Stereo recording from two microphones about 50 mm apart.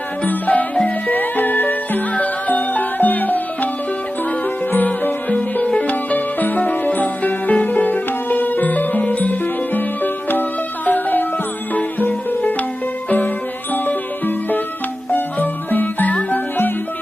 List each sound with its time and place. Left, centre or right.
0.3 s music: left
4.7 s music: left